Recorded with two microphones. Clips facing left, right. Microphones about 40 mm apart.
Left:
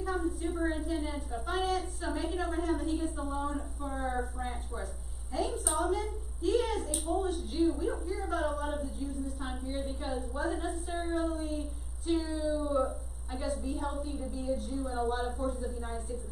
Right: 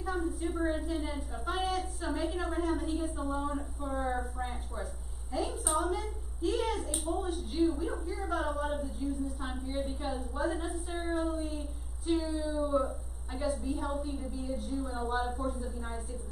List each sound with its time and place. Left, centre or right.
0.0 s a woman's voice: centre